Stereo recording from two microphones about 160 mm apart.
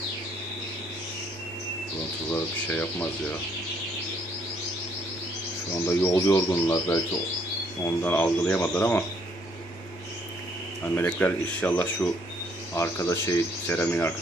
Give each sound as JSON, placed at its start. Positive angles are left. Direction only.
{"t": 2.7, "sound": "speech", "side_deg": 10}
{"t": 5.9, "sound": "speech", "side_deg": 15}
{"t": 10.8, "sound": "speech", "side_deg": 15}